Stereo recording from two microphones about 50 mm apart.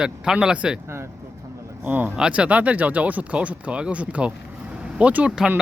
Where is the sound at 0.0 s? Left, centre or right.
Centre.